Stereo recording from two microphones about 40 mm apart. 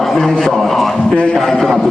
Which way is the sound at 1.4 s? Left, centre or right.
Centre.